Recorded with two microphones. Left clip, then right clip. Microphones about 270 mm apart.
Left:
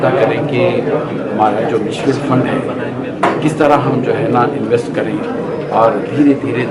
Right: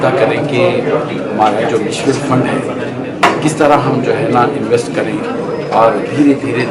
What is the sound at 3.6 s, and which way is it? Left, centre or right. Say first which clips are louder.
Speech: right 1 dB; centre.